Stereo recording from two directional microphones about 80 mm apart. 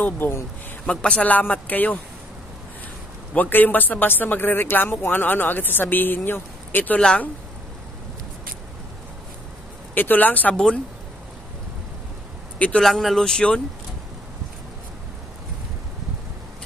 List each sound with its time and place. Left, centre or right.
0.0 s speech: left
0.8 s speech: centre
3.3 s speech: left
9.9 s speech: left
12.5 s a man's voice: centre
12.8 s speech: centre